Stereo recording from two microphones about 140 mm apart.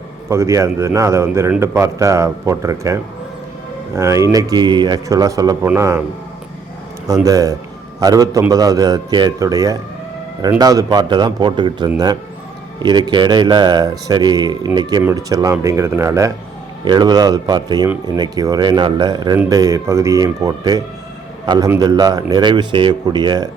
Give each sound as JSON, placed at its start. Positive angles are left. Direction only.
{"t": 0.3, "sound": "a man's voice", "side_deg": -20}
{"t": 7.1, "sound": "a man's voice", "side_deg": -25}
{"t": 16.8, "sound": "a man's voice", "side_deg": -30}